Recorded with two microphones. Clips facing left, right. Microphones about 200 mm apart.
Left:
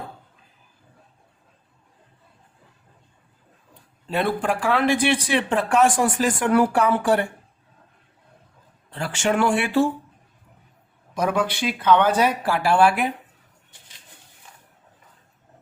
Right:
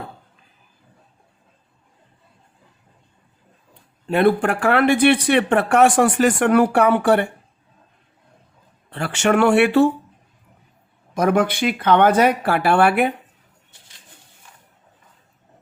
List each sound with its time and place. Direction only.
4.0 s speech: 60° right (ahead or behind)
8.9 s speech: 65° right (ahead or behind)
11.2 s speech: 50° right (ahead or behind)